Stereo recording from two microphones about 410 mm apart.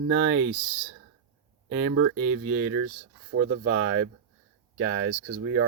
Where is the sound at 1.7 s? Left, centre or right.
Right.